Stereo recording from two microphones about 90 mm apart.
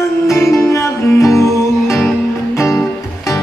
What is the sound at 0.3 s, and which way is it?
Music, 30° left (ahead or behind).